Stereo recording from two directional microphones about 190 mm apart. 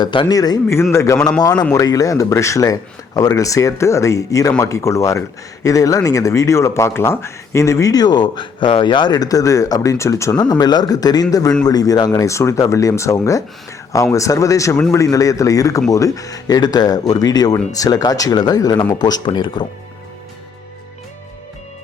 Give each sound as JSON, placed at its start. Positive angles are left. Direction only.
{"t": 0.0, "sound": "speech", "side_deg": 25}